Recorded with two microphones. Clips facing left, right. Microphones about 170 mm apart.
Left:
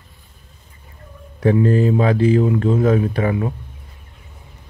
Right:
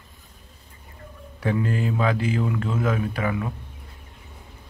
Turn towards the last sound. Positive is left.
turn(degrees=30)  # may be behind; listen again after turning